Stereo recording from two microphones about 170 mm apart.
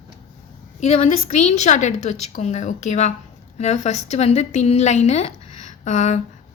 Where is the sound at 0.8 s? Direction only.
40° left (ahead or behind).